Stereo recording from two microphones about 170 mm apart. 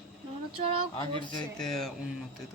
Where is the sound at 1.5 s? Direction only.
Centre (ahead or behind).